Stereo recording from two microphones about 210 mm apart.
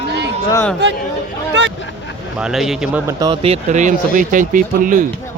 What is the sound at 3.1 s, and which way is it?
Speech, 20° right (ahead or behind).